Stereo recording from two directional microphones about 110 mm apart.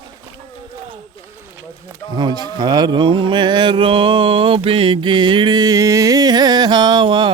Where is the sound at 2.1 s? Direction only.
40° right (ahead or behind).